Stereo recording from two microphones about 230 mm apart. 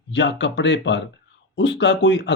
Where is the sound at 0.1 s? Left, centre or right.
Left.